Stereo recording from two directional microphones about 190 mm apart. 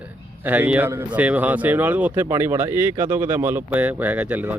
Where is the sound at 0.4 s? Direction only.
10° right (ahead or behind).